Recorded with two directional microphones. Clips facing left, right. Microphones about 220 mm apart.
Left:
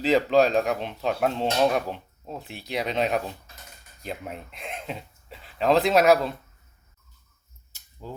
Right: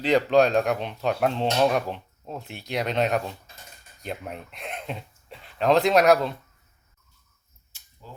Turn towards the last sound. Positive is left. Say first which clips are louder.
# even
turn(degrees=5)  # may be behind; listen again after turning